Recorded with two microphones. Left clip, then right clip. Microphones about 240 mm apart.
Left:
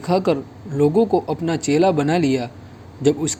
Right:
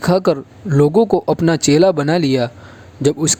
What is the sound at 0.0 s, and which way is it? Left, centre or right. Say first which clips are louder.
Speech: right 4 dB; right.